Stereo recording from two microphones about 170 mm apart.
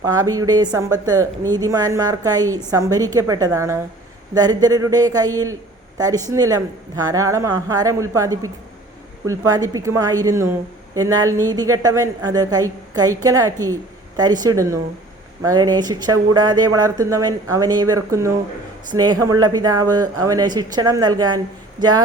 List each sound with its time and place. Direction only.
0.0 s speech: 20° right (ahead or behind)